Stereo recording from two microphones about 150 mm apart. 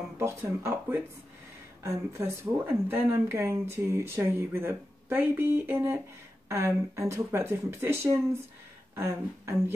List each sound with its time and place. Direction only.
0.2 s speech: 15° right (ahead or behind)